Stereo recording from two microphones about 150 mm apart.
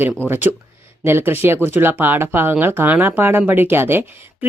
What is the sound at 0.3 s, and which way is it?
Speech, 15° right (ahead or behind).